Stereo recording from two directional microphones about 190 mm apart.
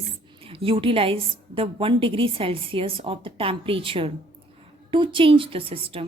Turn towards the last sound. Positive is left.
turn(degrees=-30)  # may be behind; listen again after turning